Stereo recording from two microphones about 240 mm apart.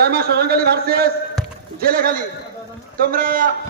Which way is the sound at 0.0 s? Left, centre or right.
Right.